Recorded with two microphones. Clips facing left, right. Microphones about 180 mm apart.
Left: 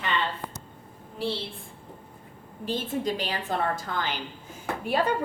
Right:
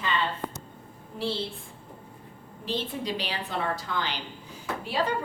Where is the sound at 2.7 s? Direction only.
50° left (ahead or behind).